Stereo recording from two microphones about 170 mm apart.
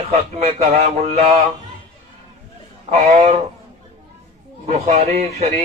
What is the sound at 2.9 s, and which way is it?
Speech, 35° right (ahead or behind).